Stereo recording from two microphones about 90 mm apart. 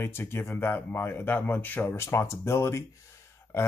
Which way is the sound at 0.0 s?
25° left (ahead or behind).